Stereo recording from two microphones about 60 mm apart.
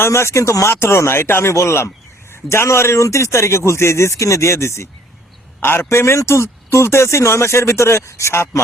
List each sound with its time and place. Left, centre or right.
0.0 s a man's voice: left
5.5 s a man's voice: left